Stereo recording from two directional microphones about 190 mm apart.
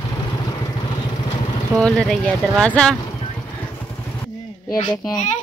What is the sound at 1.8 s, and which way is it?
Speech, 5° left (ahead or behind).